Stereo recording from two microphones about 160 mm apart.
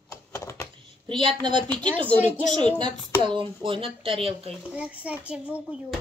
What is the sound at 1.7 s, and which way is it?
Speech, 10° left (ahead or behind).